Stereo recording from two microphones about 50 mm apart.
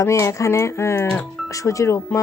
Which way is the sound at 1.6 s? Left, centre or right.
Left.